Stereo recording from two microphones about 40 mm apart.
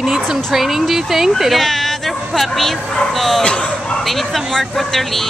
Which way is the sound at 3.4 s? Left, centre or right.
Left.